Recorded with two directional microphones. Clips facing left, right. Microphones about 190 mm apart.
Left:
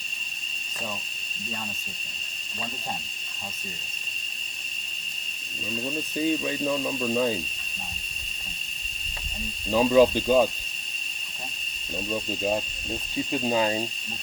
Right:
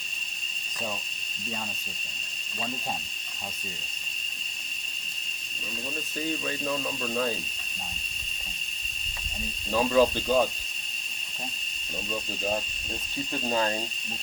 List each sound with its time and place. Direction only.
6.1 s speech: 15° left (ahead or behind)
9.7 s speech: 15° left (ahead or behind)
12.1 s speech: 15° left (ahead or behind)